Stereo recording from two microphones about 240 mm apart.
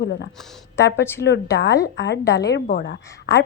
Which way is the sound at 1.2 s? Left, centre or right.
Left.